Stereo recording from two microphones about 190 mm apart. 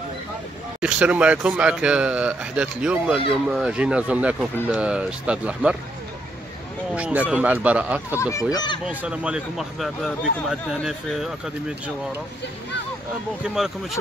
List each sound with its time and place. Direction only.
0.7 s speech: 5° right (ahead or behind)
7.0 s speech: 5° right (ahead or behind)
8.2 s speech: 15° left (ahead or behind)
8.8 s speech: 5° right (ahead or behind)